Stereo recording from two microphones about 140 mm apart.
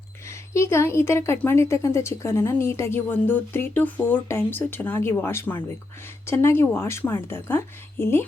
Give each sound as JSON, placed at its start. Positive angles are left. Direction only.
{"t": 0.5, "sound": "a woman's voice", "side_deg": 20}